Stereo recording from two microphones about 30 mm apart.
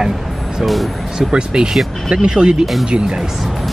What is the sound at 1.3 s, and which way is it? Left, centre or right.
Speech, right.